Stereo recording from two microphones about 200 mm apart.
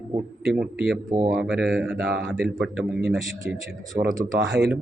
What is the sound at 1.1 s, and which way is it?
Speech, 35° right (ahead or behind).